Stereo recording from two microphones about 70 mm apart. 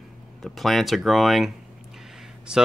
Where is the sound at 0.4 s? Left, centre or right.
Centre.